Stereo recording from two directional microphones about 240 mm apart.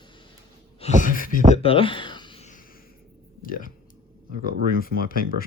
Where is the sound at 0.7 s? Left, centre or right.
Left.